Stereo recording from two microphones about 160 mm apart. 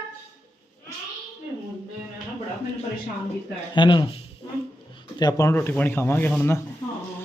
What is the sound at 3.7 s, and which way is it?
Speech, 30° left (ahead or behind).